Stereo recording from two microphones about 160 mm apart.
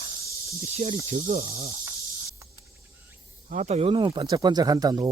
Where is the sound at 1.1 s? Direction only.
55° right (ahead or behind).